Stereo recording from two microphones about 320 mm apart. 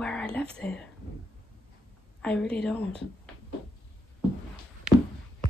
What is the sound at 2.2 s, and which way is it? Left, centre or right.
Speech, centre.